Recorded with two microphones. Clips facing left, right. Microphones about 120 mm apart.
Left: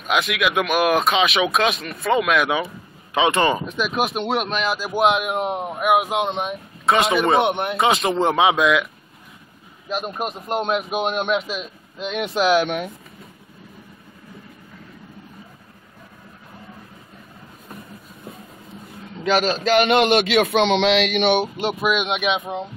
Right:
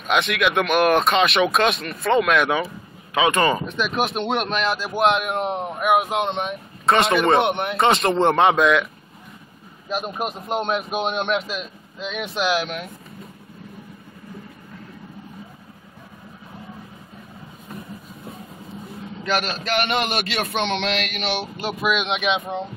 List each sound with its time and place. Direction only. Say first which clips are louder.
0.0 s a man's voice: right 1 dB; centre (ahead or behind)
3.2 s speech: left 1 dB; 25° left (ahead or behind)
3.5 s a man's voice: even; 5° left (ahead or behind)
9.8 s a man's voice: even; centre (ahead or behind)
17.6 s vehicle: right 3 dB; centre (ahead or behind)
19.2 s a man's voice: left 6 dB; centre (ahead or behind)